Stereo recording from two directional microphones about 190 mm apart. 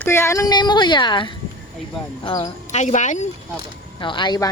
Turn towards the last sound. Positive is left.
turn(degrees=20)  # may be behind; listen again after turning